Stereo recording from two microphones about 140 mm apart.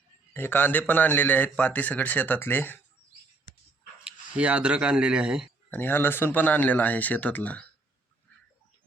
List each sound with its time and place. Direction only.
0.3 s speech: 15° left (ahead or behind)
4.0 s speech: 10° right (ahead or behind)
5.7 s speech: 15° left (ahead or behind)